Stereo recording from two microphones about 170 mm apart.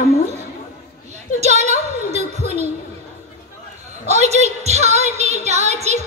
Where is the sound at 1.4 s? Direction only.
40° right (ahead or behind).